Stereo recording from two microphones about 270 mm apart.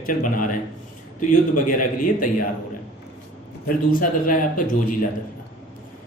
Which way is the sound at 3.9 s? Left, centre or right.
Left.